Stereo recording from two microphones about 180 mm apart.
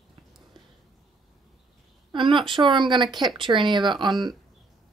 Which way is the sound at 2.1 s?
25° right (ahead or behind).